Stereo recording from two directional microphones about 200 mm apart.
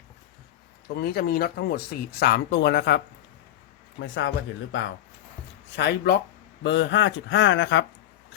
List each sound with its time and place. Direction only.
0.9 s speech: 50° left (ahead or behind)
4.0 s speech: 70° left (ahead or behind)
5.7 s speech: 60° left (ahead or behind)